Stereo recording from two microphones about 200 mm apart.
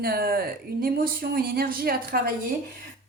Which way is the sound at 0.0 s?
50° right (ahead or behind).